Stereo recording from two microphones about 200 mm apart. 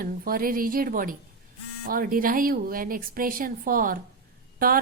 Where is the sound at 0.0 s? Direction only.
45° right (ahead or behind).